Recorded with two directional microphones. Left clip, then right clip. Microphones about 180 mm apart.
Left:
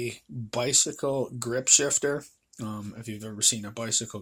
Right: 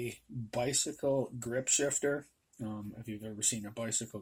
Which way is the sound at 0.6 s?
25° left (ahead or behind).